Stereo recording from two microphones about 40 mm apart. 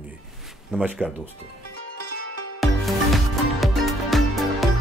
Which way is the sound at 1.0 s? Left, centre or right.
Left.